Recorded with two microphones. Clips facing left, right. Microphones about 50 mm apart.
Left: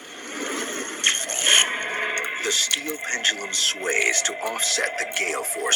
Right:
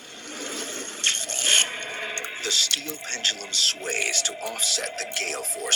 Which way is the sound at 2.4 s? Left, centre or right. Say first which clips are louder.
Left 2 dB; left.